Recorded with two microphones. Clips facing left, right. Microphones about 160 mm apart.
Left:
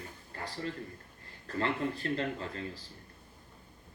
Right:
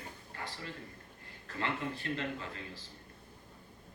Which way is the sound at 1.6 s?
40° left (ahead or behind).